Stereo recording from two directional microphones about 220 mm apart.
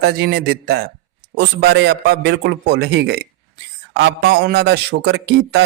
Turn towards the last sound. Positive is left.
turn(degrees=-50)  # may be behind; listen again after turning